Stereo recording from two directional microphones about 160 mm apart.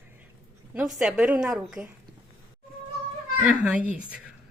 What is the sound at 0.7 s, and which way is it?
A woman's voice, 5° right (ahead or behind).